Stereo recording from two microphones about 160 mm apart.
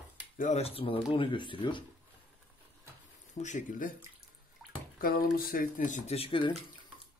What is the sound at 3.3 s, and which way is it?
Speech, 50° left (ahead or behind).